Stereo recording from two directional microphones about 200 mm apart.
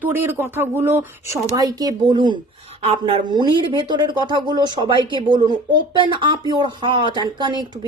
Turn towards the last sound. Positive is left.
turn(degrees=-20)  # may be behind; listen again after turning